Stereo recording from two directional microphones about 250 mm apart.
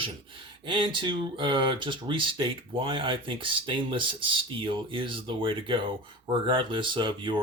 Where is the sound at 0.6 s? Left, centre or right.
Centre.